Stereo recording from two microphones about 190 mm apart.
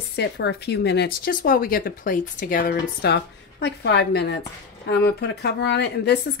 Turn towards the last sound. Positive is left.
turn(degrees=60)  # may be behind; listen again after turning